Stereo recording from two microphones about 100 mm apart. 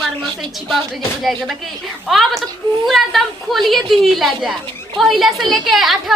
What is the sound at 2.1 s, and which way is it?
A woman's voice, centre (ahead or behind).